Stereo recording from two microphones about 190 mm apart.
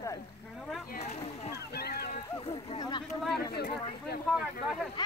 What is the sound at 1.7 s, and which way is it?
Speech, 55° left (ahead or behind).